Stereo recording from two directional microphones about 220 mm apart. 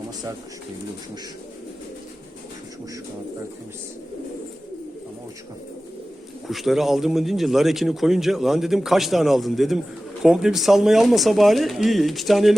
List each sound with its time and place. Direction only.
6.5 s speech: centre (ahead or behind)